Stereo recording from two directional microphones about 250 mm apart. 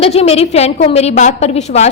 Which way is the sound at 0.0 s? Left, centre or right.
Left.